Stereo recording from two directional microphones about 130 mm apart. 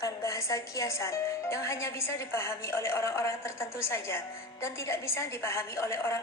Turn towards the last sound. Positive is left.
turn(degrees=20)  # may be behind; listen again after turning